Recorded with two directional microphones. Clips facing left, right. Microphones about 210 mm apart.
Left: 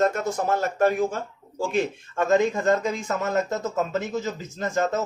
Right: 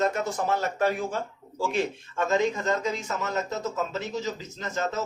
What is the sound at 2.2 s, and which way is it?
A man's voice, 50° left (ahead or behind).